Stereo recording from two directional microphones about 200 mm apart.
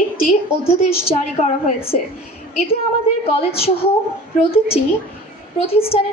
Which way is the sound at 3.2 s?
30° left (ahead or behind).